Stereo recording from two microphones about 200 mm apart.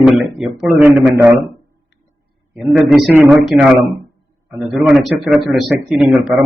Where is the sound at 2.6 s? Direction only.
Centre (ahead or behind).